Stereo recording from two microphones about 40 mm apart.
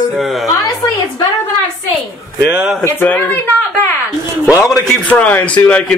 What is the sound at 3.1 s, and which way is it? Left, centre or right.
Speech, left.